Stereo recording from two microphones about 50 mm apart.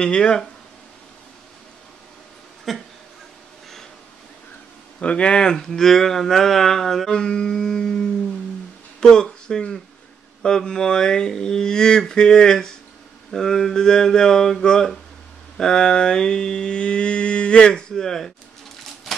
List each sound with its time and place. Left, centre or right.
0.0 s mantra: centre
2.7 s speech: centre
5.0 s mantra: left; by 7.1 s centre
7.1 s mantra: centre
9.0 s speech: centre
10.4 s mantra: centre
17.9 s mantra: centre